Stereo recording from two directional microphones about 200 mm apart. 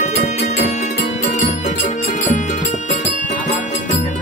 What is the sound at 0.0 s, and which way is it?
Music, 35° left (ahead or behind).